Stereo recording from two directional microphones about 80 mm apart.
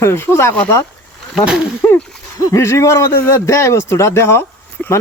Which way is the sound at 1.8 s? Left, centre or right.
Left.